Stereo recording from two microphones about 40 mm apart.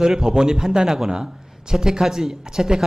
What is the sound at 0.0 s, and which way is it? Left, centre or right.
A man's voice, centre.